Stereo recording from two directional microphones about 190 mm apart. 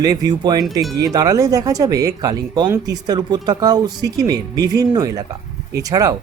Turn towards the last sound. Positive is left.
turn(degrees=-20)  # may be behind; listen again after turning